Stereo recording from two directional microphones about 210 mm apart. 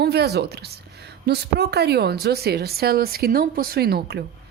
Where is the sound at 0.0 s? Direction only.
50° right (ahead or behind).